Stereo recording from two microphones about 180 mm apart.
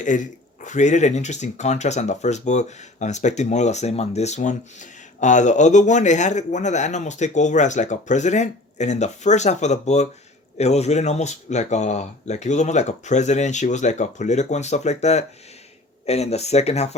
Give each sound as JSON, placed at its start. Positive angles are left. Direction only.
{"t": 0.0, "sound": "speech", "side_deg": 45}